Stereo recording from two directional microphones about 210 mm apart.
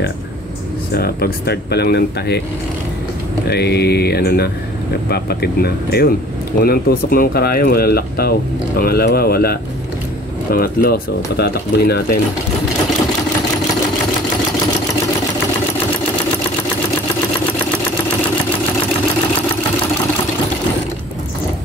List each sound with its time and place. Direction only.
0.9 s speech: 45° left (ahead or behind)
3.4 s speech: 50° left (ahead or behind)